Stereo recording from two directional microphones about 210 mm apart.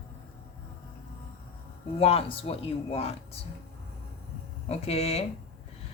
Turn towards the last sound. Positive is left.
turn(degrees=30)  # may be behind; listen again after turning